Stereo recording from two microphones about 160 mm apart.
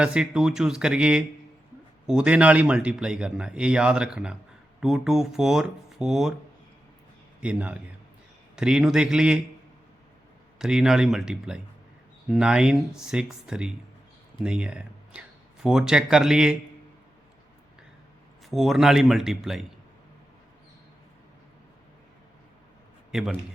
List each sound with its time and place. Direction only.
0.0 s speech: 5° right (ahead or behind)
7.4 s a man's voice: 10° right (ahead or behind)
10.6 s speech: 5° right (ahead or behind)
18.4 s speech: centre (ahead or behind)
23.1 s speech: centre (ahead or behind)